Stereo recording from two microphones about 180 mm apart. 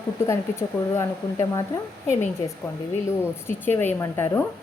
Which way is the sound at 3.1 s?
10° left (ahead or behind).